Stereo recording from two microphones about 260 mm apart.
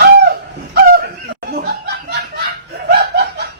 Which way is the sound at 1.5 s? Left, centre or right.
Right.